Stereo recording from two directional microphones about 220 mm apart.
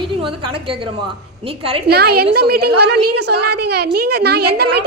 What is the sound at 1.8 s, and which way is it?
A woman's voice, 45° right (ahead or behind).